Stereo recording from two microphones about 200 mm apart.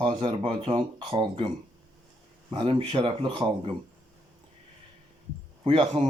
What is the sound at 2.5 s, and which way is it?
Speech, 25° right (ahead or behind).